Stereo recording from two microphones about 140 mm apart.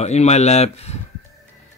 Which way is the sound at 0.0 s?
50° left (ahead or behind).